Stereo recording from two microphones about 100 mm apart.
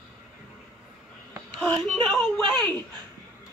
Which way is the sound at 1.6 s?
5° left (ahead or behind).